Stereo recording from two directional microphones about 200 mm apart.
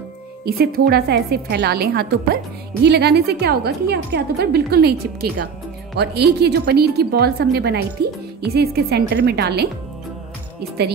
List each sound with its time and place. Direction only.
0.5 s a woman's voice: 50° right (ahead or behind)
5.9 s a woman's voice: 55° right (ahead or behind)